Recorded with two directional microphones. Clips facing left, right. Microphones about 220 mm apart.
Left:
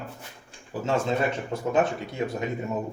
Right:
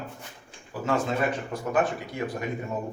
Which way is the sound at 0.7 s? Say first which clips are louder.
Left 1 dB; 25° left (ahead or behind).